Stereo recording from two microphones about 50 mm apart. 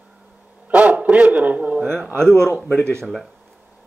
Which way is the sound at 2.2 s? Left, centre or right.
Centre.